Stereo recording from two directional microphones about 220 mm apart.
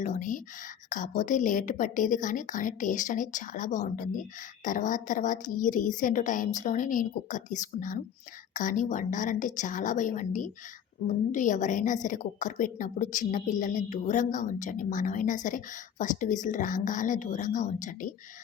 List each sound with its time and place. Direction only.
0.0 s a woman's voice: 35° left (ahead or behind)